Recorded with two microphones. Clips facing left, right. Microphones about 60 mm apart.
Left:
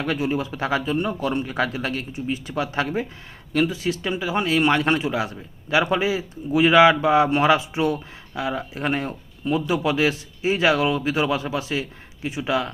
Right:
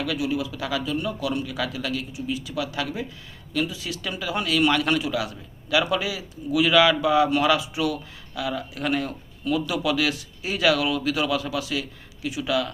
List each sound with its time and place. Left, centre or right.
0.0 s speech: left